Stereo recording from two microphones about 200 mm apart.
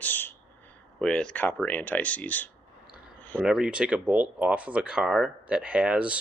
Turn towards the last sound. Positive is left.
turn(degrees=-5)  # may be behind; listen again after turning